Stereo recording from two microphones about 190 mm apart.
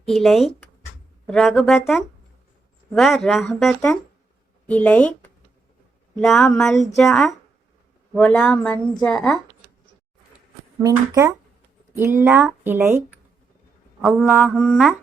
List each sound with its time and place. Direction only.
0.1 s a woman's voice: centre (ahead or behind)
2.9 s a woman's voice: centre (ahead or behind)
10.8 s speech: 20° right (ahead or behind)
14.0 s a woman's voice: 5° right (ahead or behind)